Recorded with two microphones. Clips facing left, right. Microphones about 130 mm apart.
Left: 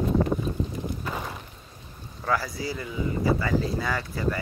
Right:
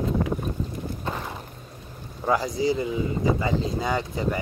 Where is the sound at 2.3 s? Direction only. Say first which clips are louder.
Right 5 dB; 20° right (ahead or behind).